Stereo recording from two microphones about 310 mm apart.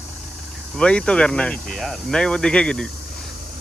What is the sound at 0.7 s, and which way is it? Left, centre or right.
Speech, centre.